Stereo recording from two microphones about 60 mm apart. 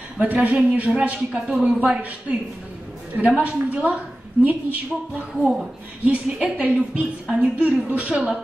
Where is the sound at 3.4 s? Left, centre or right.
Right.